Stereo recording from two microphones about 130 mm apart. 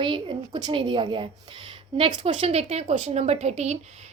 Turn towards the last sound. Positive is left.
turn(degrees=-55)  # may be behind; listen again after turning